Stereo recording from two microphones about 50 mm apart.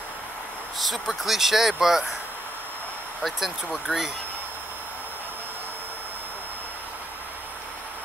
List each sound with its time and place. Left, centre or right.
0.7 s speech: centre
3.2 s speech: centre
3.9 s speech: centre